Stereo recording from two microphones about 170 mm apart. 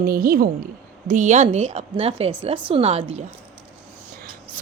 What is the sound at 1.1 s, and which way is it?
A woman's voice, 45° right (ahead or behind).